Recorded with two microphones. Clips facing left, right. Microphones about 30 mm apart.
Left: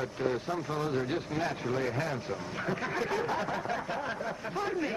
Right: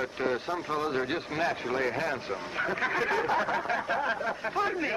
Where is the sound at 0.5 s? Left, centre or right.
Right.